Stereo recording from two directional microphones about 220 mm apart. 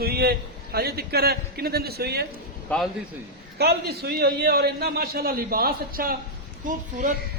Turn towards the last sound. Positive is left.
turn(degrees=-35)  # may be behind; listen again after turning